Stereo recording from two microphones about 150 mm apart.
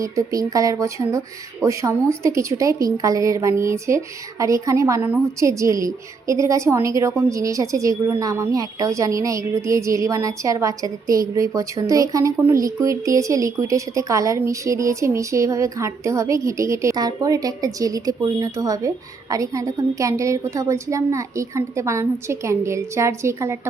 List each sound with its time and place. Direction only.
0.0 s a woman's voice: 20° right (ahead or behind)